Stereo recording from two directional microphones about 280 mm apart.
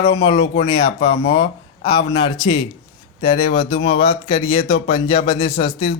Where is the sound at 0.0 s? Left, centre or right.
Centre.